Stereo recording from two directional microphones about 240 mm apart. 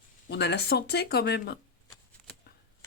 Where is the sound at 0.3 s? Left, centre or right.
Left.